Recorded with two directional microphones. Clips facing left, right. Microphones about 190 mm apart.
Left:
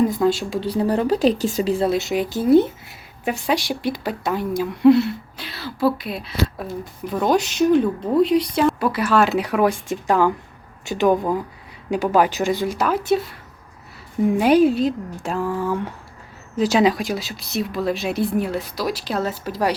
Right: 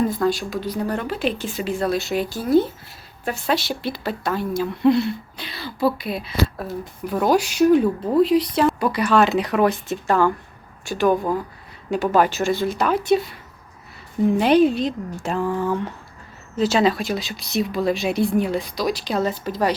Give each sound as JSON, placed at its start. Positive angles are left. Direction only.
{"t": 0.3, "sound": "speech", "side_deg": 25}